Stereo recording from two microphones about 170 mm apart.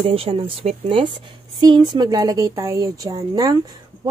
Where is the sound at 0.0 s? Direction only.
35° right (ahead or behind).